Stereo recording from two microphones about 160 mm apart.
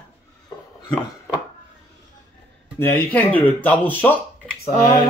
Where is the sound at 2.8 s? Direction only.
10° left (ahead or behind).